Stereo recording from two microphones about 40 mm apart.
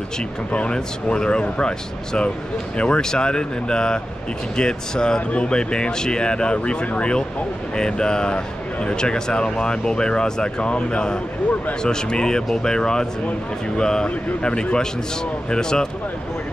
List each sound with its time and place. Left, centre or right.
0.5 s speech: left